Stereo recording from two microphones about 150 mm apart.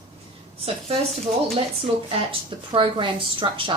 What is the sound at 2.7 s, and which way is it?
A woman's voice, 35° right (ahead or behind).